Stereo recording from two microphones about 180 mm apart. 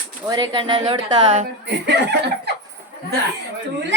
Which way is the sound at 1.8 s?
70° right (ahead or behind).